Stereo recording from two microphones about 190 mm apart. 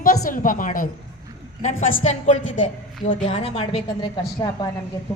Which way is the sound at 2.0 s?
40° left (ahead or behind).